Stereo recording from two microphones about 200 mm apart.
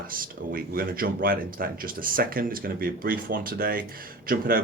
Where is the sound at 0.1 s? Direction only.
45° right (ahead or behind).